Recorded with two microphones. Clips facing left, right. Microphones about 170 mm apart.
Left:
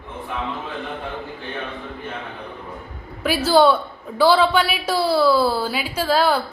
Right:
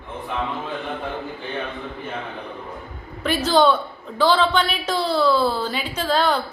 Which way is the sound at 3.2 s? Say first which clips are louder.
Left 2 dB; 10° left (ahead or behind).